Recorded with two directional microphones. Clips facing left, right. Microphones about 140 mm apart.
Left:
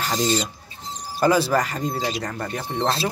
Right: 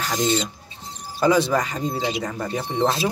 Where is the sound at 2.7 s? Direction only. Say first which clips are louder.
Right 2 dB; 15° right (ahead or behind).